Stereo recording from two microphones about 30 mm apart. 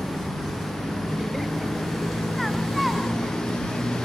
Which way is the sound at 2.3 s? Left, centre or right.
Centre.